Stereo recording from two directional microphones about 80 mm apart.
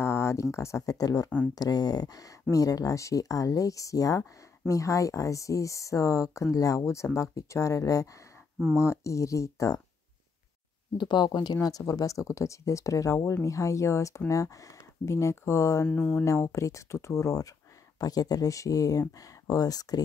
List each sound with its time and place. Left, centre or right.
0.0 s speech: left
11.0 s speech: left
15.9 s speech: centre
16.3 s speech: left